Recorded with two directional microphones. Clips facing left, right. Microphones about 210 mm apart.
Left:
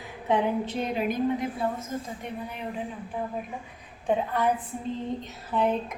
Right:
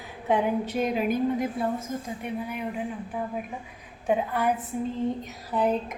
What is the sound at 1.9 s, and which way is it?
Speech, 15° right (ahead or behind).